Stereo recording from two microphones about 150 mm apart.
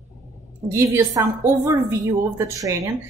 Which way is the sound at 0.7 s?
15° right (ahead or behind).